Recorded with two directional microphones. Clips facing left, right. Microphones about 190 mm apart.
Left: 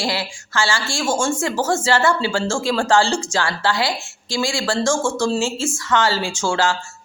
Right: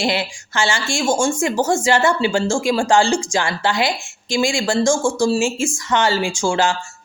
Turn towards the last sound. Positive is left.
turn(degrees=-15)  # may be behind; listen again after turning